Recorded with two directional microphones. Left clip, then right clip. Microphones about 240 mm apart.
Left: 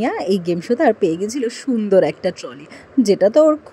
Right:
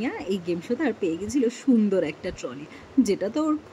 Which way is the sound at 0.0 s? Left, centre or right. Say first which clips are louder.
Left 10 dB; centre.